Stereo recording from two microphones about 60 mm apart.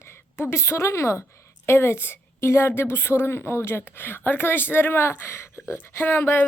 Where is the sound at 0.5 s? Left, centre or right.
Left.